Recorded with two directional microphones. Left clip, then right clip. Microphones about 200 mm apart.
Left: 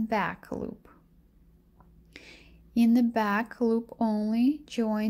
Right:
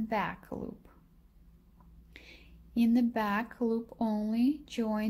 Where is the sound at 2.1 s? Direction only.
20° left (ahead or behind).